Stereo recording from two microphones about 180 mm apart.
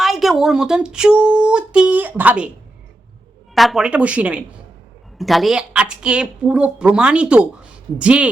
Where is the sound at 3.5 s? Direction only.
Centre (ahead or behind).